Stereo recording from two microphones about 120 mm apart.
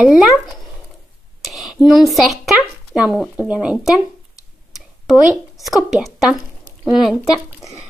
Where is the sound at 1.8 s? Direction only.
Centre (ahead or behind).